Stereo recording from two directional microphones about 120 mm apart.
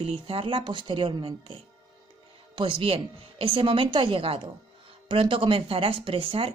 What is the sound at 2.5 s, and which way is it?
Speech, 45° right (ahead or behind).